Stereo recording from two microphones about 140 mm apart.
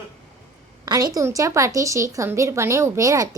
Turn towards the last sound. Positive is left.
turn(degrees=-25)  # may be behind; listen again after turning